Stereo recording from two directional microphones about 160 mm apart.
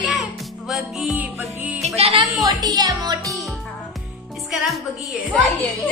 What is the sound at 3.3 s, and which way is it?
Music, centre (ahead or behind).